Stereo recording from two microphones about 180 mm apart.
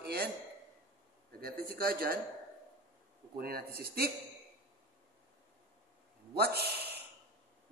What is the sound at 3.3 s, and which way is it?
Speech, 60° right (ahead or behind).